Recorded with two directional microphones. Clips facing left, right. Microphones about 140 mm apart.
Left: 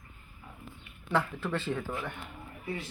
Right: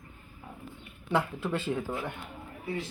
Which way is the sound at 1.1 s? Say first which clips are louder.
Right 1 dB; 15° right (ahead or behind).